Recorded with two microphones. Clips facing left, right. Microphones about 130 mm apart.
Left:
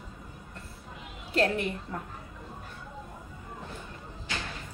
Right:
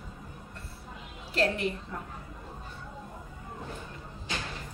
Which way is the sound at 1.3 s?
45° left (ahead or behind).